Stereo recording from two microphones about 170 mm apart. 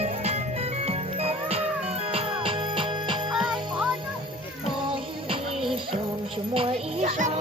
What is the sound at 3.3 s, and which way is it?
Music, centre (ahead or behind).